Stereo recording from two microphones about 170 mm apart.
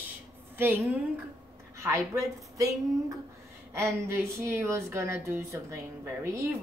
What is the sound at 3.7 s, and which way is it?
A woman's voice, 15° right (ahead or behind).